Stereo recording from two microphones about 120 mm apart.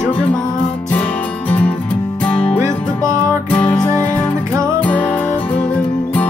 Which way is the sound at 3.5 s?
10° left (ahead or behind).